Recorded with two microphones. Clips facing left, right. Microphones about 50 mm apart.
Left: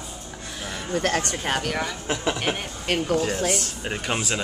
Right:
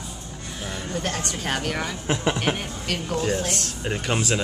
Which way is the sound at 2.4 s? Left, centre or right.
Centre.